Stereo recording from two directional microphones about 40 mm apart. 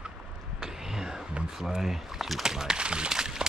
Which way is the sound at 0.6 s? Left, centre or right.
Centre.